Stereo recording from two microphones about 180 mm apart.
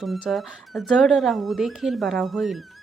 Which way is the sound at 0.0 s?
Centre (ahead or behind).